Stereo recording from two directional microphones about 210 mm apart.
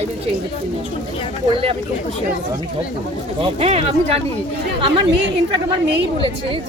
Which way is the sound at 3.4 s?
30° right (ahead or behind).